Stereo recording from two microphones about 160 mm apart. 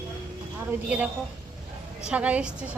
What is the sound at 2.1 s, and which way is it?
Speech, 10° right (ahead or behind).